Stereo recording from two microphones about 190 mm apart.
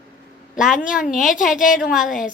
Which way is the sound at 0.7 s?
5° right (ahead or behind).